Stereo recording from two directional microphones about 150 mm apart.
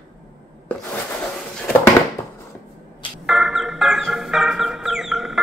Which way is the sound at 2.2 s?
15° left (ahead or behind).